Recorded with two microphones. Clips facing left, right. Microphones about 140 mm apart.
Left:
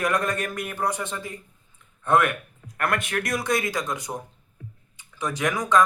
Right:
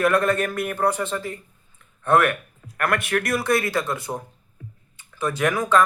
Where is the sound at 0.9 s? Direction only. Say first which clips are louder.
Right 5 dB; 15° left (ahead or behind).